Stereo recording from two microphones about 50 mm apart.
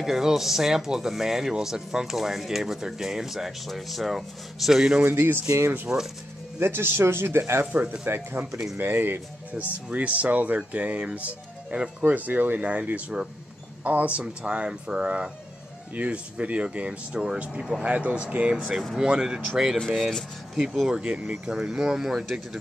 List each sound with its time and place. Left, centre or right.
0.0 s speech: centre
5.0 s speech: right
5.9 s speech: right
6.6 s speech: right
7.7 s speech: right
8.4 s speech: right
8.7 s speech: right
9.5 s speech: right
12.0 s speech: right
14.2 s speech: centre
17.8 s speech: right; by 20.9 s centre
20.9 s speech: centre